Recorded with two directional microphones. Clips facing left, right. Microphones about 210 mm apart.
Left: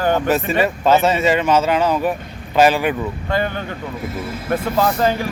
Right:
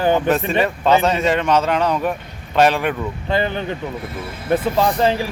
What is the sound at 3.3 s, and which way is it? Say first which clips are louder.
Speech: right 2 dB; 25° right (ahead or behind).